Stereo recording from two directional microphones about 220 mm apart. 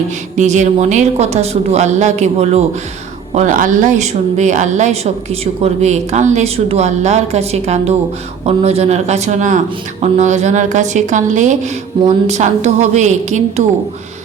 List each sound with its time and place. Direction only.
0.3 s a woman's voice: 35° right (ahead or behind)